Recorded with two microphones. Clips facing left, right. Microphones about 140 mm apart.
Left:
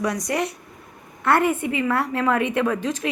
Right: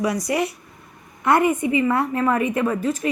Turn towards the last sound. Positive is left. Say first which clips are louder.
# right 1 dB
turn(degrees=-5)  # may be behind; listen again after turning